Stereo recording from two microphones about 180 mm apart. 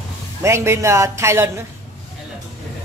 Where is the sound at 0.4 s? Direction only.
15° right (ahead or behind).